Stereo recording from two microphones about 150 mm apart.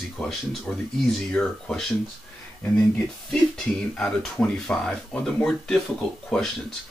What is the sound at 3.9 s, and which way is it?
Speech, 5° left (ahead or behind).